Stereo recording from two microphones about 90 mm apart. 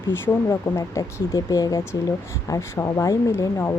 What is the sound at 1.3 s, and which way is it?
Speech, 45° left (ahead or behind).